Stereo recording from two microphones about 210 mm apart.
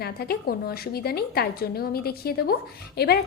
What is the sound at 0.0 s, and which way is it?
A woman's voice, 45° left (ahead or behind).